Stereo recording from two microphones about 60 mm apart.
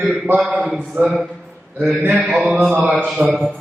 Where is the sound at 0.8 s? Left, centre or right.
Right.